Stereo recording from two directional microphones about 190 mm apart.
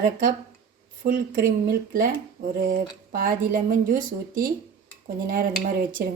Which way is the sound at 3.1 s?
50° right (ahead or behind).